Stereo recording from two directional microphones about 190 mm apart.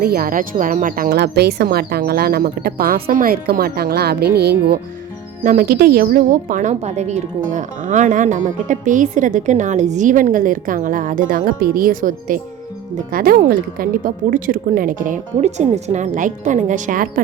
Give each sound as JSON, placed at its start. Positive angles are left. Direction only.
{"t": 0.0, "sound": "speech", "side_deg": -50}
{"t": 5.4, "sound": "speech", "side_deg": -45}